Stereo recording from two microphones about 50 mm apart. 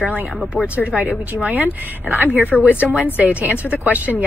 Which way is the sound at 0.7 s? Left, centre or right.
Left.